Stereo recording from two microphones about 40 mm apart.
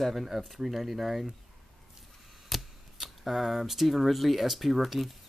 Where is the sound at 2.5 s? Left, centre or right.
Centre.